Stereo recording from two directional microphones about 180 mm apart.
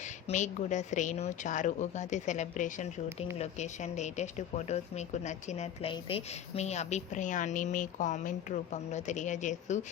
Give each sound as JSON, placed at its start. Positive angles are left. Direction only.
{"t": 0.3, "sound": "a woman's voice", "side_deg": 40}